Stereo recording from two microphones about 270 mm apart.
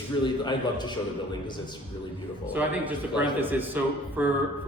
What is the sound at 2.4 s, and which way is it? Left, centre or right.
A man's voice, centre.